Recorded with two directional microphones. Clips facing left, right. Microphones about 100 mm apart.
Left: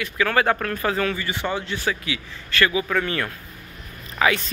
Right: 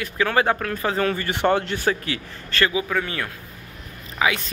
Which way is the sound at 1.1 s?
55° right (ahead or behind).